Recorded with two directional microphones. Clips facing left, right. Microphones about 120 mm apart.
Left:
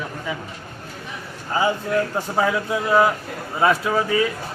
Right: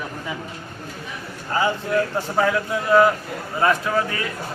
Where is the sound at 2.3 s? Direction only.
15° left (ahead or behind).